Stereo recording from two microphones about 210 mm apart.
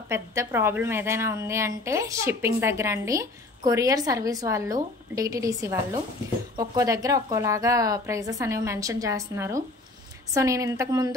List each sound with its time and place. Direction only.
0.1 s a woman's voice: 15° right (ahead or behind)